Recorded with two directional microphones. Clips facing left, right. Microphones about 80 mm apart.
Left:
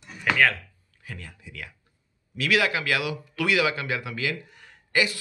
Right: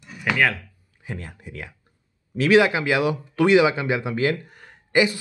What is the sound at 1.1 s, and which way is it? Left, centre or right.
Speech, right.